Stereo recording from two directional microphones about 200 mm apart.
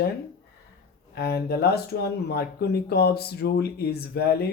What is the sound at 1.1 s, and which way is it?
Speech, 55° left (ahead or behind).